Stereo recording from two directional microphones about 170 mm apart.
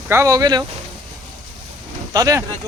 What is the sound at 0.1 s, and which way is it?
Speech, 20° right (ahead or behind).